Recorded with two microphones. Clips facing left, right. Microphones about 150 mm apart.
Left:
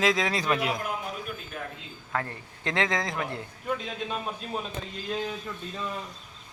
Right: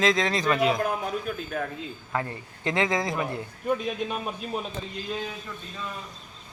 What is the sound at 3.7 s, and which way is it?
Speech, 15° right (ahead or behind).